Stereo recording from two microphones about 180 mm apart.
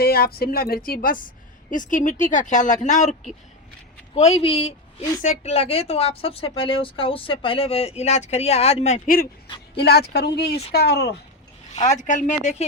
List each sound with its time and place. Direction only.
0.0 s a woman's voice: 60° left (ahead or behind)
9.7 s speech: 65° left (ahead or behind)
11.9 s speech: 45° left (ahead or behind)